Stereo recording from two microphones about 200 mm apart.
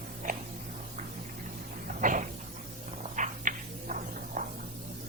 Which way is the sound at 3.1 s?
40° right (ahead or behind).